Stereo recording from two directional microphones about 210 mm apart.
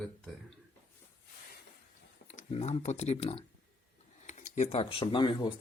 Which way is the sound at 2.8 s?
30° left (ahead or behind).